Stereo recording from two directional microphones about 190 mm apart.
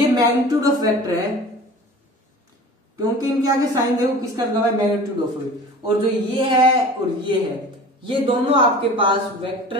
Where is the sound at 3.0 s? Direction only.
20° right (ahead or behind).